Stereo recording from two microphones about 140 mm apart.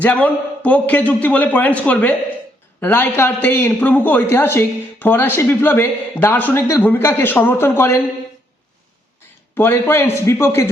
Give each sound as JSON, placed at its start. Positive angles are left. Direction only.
{"t": 0.0, "sound": "speech", "side_deg": 10}
{"t": 9.6, "sound": "speech", "side_deg": 15}